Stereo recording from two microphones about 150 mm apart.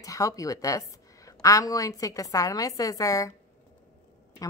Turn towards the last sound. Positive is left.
turn(degrees=20)  # may be behind; listen again after turning